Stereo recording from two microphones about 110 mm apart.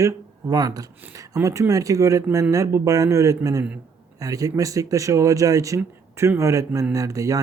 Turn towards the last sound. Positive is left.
turn(degrees=-30)  # may be behind; listen again after turning